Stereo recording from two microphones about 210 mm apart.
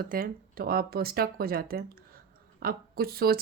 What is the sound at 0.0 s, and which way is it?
Speech, 45° right (ahead or behind).